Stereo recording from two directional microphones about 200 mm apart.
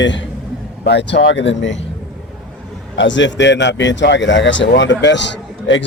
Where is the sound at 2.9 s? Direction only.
65° left (ahead or behind).